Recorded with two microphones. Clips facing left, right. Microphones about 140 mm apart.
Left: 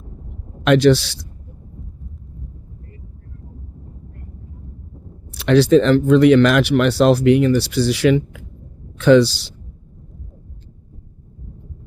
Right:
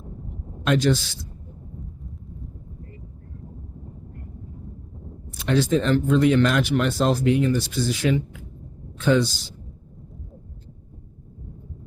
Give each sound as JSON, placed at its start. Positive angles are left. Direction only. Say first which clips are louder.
{"t": 0.6, "sound": "speech", "louder": "left 8 dB", "side_deg": 80}
{"t": 5.3, "sound": "speech", "louder": "left 9 dB", "side_deg": 75}